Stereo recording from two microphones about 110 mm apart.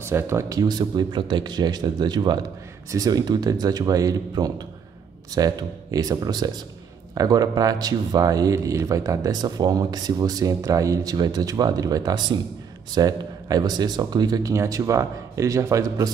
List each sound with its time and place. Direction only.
0.0 s speech: 25° right (ahead or behind)